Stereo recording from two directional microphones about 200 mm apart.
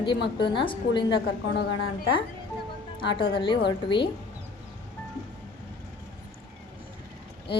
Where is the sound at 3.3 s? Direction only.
25° left (ahead or behind).